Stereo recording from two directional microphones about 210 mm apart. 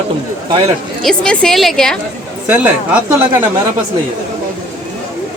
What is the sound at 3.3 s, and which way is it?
Speech, 20° right (ahead or behind).